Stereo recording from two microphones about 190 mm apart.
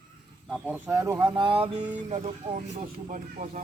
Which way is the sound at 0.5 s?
5° right (ahead or behind).